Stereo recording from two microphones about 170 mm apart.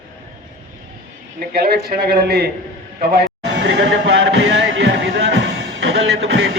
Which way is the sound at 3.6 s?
90° right.